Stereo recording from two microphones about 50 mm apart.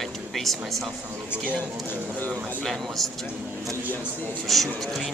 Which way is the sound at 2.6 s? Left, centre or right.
Centre.